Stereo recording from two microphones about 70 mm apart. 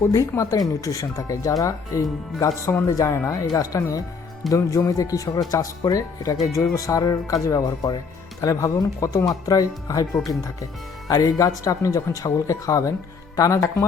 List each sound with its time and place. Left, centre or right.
0.1 s speech: left
3.0 s speech: left
3.5 s a man's voice: left